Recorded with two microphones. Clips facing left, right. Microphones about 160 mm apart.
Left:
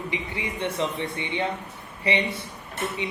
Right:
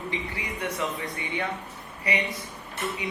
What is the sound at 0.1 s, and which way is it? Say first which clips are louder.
A man's voice: left 2 dB; 25° left (ahead or behind).